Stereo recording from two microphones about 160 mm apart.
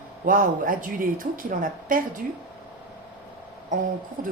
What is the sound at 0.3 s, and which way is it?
A woman's voice, 60° right (ahead or behind).